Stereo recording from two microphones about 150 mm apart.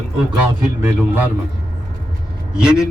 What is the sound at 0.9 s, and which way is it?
Speech, 15° right (ahead or behind).